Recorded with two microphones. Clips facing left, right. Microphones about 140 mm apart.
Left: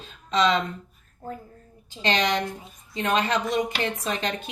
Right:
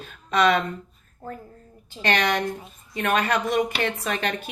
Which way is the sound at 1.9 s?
20° left (ahead or behind).